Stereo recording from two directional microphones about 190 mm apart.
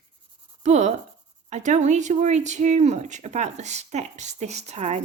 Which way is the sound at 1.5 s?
40° right (ahead or behind).